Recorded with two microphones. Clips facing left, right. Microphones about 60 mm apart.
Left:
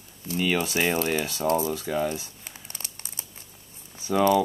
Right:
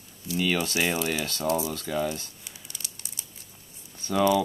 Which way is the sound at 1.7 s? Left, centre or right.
Centre.